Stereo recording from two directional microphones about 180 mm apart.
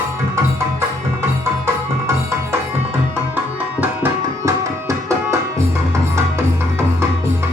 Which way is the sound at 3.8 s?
15° right (ahead or behind).